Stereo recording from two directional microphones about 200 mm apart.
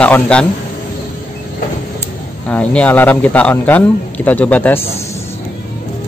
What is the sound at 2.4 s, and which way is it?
A man's voice, 5° left (ahead or behind).